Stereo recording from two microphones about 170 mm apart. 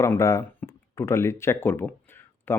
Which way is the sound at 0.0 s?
15° left (ahead or behind).